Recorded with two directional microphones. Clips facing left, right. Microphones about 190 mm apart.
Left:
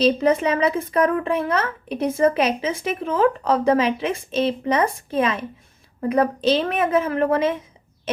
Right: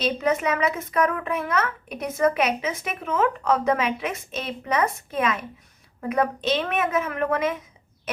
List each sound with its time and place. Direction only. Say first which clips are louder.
0.0 s speech: left 6 dB; 30° left (ahead or behind)
8.1 s owl: left 6 dB; 25° left (ahead or behind)